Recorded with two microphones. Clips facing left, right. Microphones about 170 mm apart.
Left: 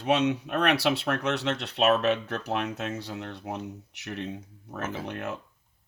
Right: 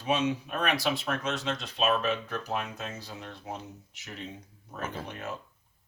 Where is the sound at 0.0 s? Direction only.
65° left (ahead or behind).